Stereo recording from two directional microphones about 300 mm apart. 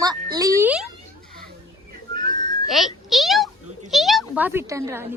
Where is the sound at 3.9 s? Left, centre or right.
Centre.